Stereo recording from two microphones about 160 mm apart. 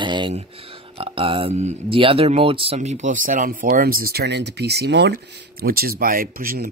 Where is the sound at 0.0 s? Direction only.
30° right (ahead or behind).